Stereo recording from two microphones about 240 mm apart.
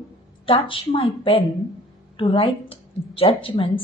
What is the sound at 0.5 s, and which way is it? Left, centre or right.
Speech, left.